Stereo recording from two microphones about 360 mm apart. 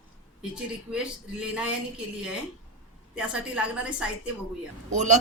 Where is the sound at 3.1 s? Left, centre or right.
Centre.